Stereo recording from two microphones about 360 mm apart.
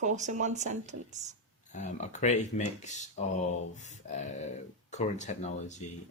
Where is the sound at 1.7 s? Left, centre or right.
Centre.